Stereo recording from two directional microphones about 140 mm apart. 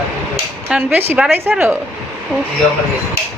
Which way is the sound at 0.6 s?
10° right (ahead or behind).